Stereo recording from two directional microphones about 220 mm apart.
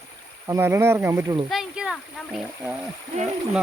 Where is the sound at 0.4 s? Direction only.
10° right (ahead or behind).